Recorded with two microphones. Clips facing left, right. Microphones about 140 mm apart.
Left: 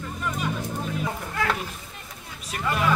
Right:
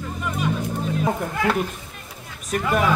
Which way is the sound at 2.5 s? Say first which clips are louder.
Right 5 dB; 50° right (ahead or behind).